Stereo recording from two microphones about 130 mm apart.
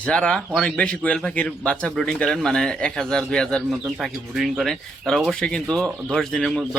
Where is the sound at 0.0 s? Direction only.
5° left (ahead or behind).